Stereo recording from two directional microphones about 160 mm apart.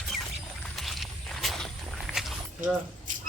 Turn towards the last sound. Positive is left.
turn(degrees=-50)  # may be behind; listen again after turning